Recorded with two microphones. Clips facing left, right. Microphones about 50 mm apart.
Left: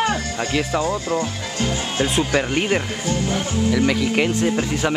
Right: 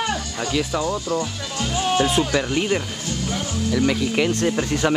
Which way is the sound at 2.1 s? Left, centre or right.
Left.